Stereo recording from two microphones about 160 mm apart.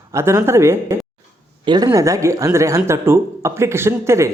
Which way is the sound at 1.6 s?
30° right (ahead or behind).